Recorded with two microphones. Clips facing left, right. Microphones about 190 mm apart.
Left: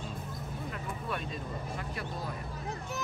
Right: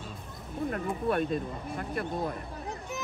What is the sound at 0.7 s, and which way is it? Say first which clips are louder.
Speech: right 9 dB; 50° right (ahead or behind).